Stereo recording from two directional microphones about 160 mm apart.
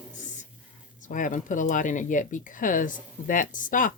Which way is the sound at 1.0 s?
55° left (ahead or behind).